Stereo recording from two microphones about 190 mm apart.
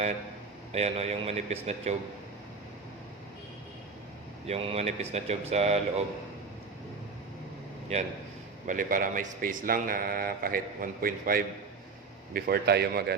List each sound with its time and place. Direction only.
0.7 s speech: 35° right (ahead or behind)
4.4 s speech: 30° right (ahead or behind)
8.6 s a man's voice: 45° right (ahead or behind)